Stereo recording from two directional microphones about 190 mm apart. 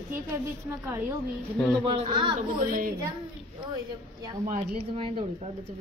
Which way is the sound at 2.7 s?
45° right (ahead or behind).